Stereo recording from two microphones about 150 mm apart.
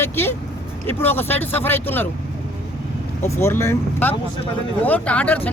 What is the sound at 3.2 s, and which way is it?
A man's voice, 20° left (ahead or behind).